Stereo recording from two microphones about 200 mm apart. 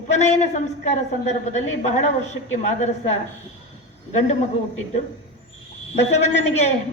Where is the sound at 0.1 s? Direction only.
35° left (ahead or behind).